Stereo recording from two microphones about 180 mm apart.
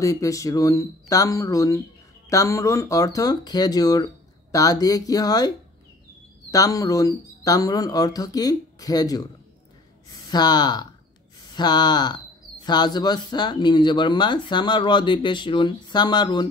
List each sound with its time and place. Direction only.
0.0 s speech: 20° left (ahead or behind)
6.5 s speech: 20° left (ahead or behind)
10.2 s speech: 25° left (ahead or behind)